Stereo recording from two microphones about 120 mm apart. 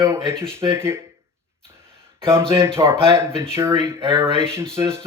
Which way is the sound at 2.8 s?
20° right (ahead or behind).